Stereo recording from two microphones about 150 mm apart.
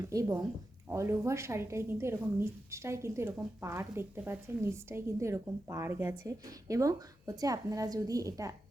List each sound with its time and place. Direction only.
0.0 s a woman's voice: 20° right (ahead or behind)